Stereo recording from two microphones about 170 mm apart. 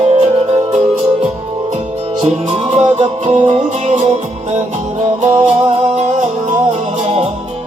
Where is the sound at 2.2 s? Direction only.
35° right (ahead or behind).